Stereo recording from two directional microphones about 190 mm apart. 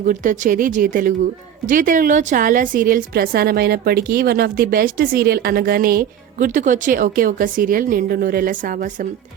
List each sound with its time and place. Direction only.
0.0 s a woman's voice: 40° right (ahead or behind)